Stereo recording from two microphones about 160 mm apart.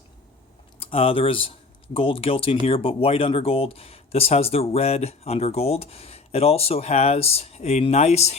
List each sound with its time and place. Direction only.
0.8 s speech: 35° left (ahead or behind)